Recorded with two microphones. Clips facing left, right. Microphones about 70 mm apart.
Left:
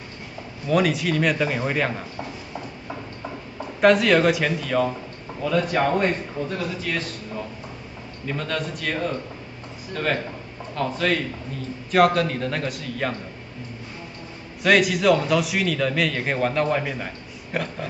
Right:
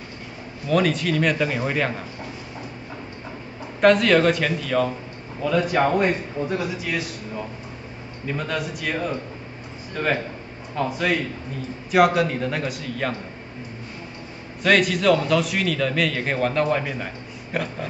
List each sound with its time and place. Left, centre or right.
0.7 s a man's voice: centre
3.8 s a man's voice: centre
10.7 s a man's voice: centre
14.6 s a man's voice: centre